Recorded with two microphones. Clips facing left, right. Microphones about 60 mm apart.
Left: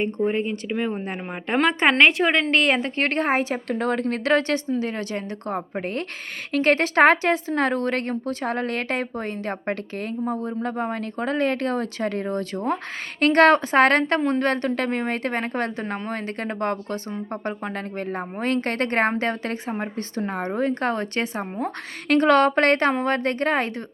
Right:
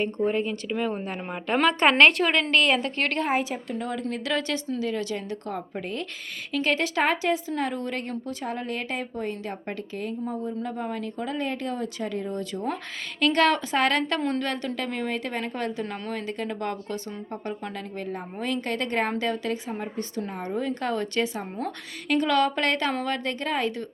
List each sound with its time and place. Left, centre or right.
0.3 s speech: left
1.5 s speech: centre
2.5 s a woman's voice: left
3.3 s a woman's voice: left
4.1 s a woman's voice: left
22.1 s a woman's voice: left